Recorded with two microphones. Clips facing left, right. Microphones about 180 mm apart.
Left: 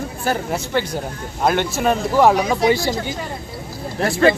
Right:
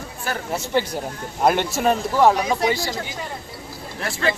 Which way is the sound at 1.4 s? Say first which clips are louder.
Left 1 dB; centre (ahead or behind).